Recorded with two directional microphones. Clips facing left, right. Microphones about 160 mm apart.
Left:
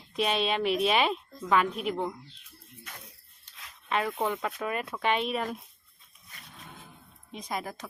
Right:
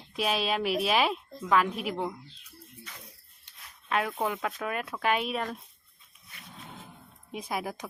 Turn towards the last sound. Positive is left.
turn(degrees=-10)  # may be behind; listen again after turning